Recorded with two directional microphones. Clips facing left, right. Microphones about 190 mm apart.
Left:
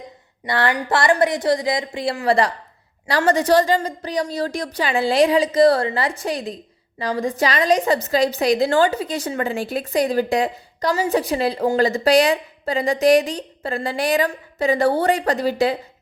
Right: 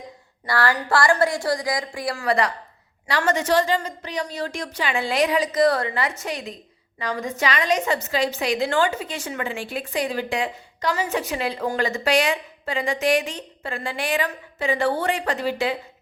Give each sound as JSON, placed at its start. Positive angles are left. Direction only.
{"t": 0.4, "sound": "a woman's voice", "side_deg": 20}